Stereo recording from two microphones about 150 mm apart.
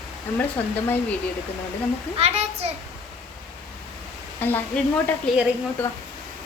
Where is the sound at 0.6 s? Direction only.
15° left (ahead or behind).